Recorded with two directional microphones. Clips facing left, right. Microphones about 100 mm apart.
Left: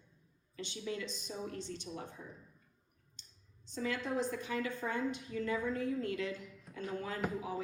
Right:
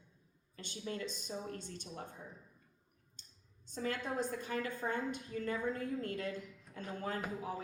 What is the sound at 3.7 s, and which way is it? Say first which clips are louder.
A woman's voice: left 2 dB; 45° right (ahead or behind).